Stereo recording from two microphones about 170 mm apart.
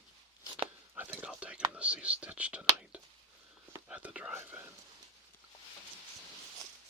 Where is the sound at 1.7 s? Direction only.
5° right (ahead or behind).